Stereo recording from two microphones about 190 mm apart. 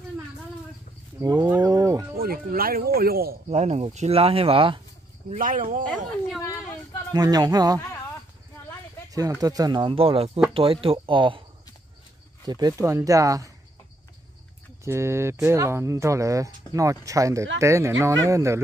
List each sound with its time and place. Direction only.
1.2 s livestock: 20° right (ahead or behind)
2.1 s speech: 50° right (ahead or behind)
3.4 s speech: 35° right (ahead or behind)
5.3 s speech: 45° right (ahead or behind)
5.9 s speech: centre (ahead or behind)
7.1 s speech: 20° right (ahead or behind)
9.1 s speech: 20° right (ahead or behind)
12.4 s speech: 20° right (ahead or behind)
14.9 s speech: 15° right (ahead or behind)